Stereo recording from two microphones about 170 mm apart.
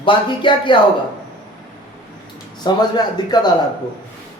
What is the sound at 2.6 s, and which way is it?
Speech, 25° left (ahead or behind).